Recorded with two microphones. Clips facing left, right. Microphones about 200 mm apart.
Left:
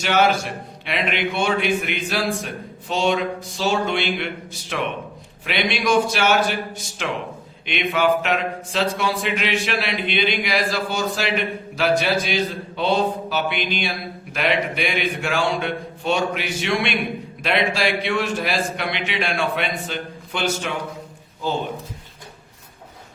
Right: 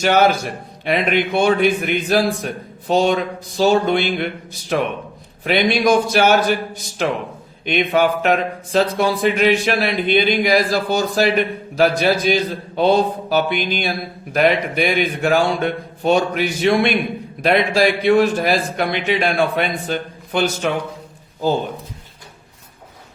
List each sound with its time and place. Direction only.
0.0 s a man's voice: 40° right (ahead or behind)
7.6 s a man's voice: 40° right (ahead or behind)